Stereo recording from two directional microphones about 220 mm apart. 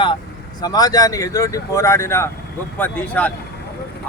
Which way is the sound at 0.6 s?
15° left (ahead or behind).